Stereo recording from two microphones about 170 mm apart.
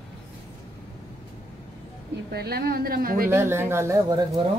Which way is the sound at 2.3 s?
70° right (ahead or behind).